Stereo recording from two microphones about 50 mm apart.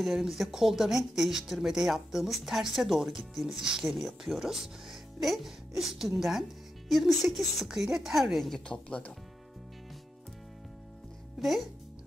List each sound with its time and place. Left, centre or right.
0.0 s speech: centre
8.6 s speech: left
11.4 s speech: centre